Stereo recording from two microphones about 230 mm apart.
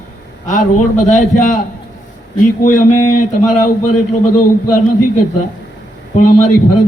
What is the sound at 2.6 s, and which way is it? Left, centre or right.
A man's voice, left.